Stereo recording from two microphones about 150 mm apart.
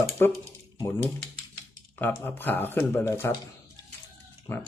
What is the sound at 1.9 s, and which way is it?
Speech, 15° left (ahead or behind).